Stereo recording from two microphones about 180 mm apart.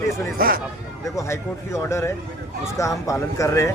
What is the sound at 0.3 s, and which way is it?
Speech, 55° right (ahead or behind).